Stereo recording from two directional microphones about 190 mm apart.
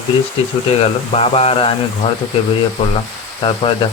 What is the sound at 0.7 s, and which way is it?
Speech, 30° left (ahead or behind).